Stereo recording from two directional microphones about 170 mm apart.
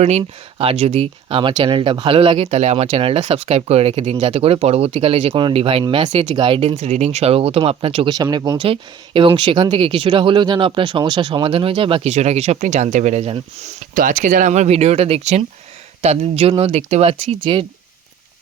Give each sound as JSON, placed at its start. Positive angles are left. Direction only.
{"t": 0.0, "sound": "speech", "side_deg": -40}
{"t": 6.1, "sound": "speech", "side_deg": -45}
{"t": 6.3, "sound": "speech", "side_deg": -30}
{"t": 13.9, "sound": "speech", "side_deg": -50}